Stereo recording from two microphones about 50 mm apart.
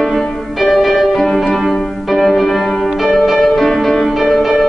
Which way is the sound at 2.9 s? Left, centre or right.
Centre.